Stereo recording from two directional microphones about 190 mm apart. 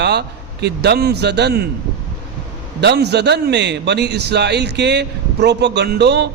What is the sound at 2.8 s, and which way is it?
A man's voice, 60° right (ahead or behind).